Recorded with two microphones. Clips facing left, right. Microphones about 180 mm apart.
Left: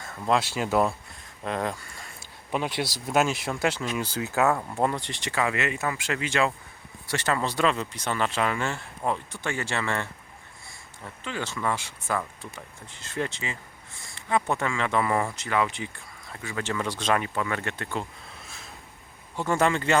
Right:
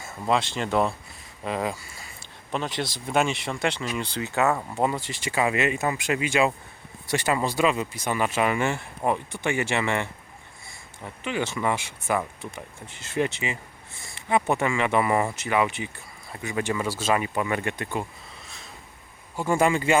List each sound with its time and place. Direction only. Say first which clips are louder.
0.0 s a sound: right 1 dB; 10° right (ahead or behind)
0.3 s speech: left 1 dB; 5° left (ahead or behind)
2.5 s speech: left 1 dB; 10° left (ahead or behind)
5.4 s speech: right 3 dB; 15° right (ahead or behind)
18.4 s a sound: even; centre (ahead or behind)
19.4 s speech: right 2 dB; 10° right (ahead or behind)